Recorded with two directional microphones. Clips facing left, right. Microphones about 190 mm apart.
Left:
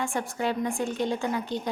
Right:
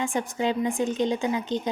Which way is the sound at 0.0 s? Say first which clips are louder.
Right 3 dB; 20° right (ahead or behind).